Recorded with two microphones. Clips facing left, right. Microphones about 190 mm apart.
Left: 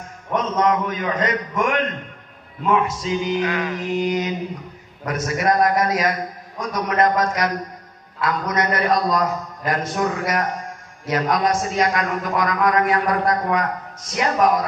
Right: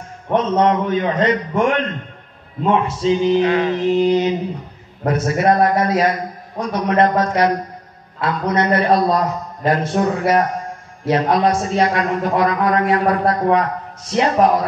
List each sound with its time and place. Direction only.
0.3 s a man's voice: 30° right (ahead or behind)